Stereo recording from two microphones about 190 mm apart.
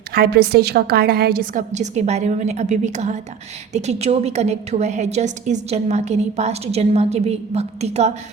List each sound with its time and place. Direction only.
0.1 s a woman's voice: 55° right (ahead or behind); by 8.1 s 35° right (ahead or behind)